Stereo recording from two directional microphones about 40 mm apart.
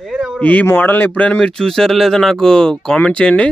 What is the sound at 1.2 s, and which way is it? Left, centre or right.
Speech, left.